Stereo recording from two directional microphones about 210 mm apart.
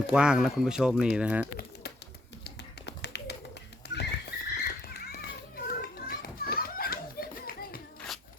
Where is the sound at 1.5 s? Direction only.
50° left (ahead or behind).